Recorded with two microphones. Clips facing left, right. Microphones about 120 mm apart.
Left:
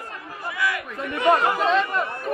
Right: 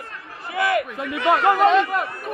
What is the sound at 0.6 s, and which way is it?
Chatter, 60° right (ahead or behind).